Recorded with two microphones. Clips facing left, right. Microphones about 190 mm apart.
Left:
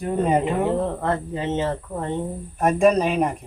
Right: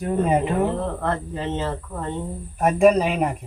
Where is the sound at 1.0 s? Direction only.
15° left (ahead or behind).